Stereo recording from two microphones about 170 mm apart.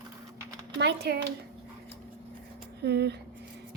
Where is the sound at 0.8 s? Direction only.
75° right (ahead or behind).